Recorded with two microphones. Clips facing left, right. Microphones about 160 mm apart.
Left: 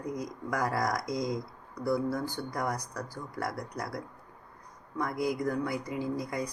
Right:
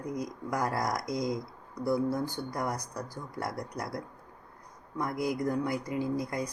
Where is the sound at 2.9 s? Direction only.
20° right (ahead or behind).